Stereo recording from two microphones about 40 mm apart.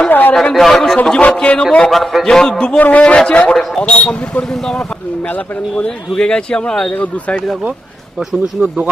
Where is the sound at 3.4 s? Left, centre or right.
Centre.